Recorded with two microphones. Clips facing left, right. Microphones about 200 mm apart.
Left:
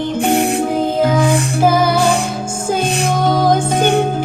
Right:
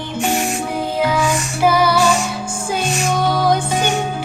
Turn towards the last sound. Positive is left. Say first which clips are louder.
# left 4 dB
turn(degrees=55)  # may be behind; listen again after turning